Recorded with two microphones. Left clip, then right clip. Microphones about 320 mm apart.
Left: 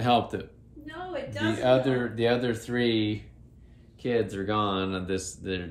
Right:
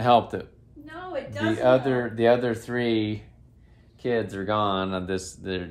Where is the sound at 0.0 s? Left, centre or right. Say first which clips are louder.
Right 5 dB; centre.